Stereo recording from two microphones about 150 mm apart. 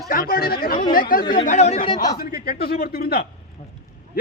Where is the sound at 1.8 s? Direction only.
30° left (ahead or behind).